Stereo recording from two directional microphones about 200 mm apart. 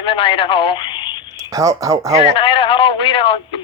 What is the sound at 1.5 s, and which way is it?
Speech, 15° right (ahead or behind).